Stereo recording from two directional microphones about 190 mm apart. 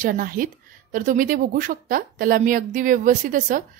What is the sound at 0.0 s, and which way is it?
A woman's voice, 45° right (ahead or behind).